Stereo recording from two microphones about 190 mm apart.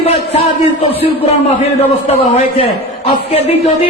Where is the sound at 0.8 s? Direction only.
30° left (ahead or behind).